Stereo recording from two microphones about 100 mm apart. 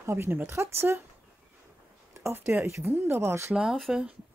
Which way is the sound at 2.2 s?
25° right (ahead or behind).